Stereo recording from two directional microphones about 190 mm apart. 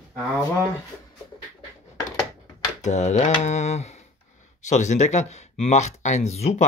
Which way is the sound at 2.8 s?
35° left (ahead or behind).